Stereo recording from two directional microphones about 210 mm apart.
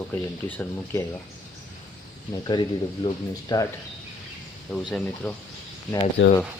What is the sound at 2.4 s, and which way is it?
Speech, 20° left (ahead or behind).